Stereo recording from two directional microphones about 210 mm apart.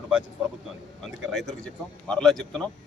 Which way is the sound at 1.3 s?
Centre (ahead or behind).